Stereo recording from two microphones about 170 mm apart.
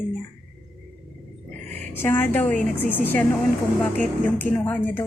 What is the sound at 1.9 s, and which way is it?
A woman's voice, 15° left (ahead or behind).